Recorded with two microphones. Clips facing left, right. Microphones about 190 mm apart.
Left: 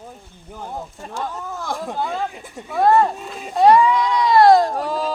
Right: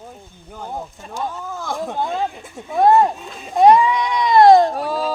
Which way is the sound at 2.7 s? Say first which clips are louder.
Right 2 dB; 20° right (ahead or behind).